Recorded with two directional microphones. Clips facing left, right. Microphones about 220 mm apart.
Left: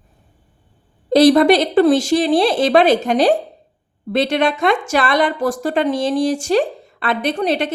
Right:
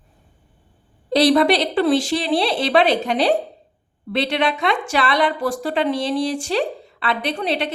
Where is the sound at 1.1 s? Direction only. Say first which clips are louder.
Left 5 dB; 45° left (ahead or behind).